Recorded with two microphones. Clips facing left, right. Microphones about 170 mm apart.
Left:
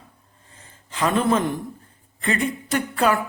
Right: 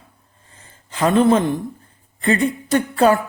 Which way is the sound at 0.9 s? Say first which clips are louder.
Right 5 dB; 35° right (ahead or behind).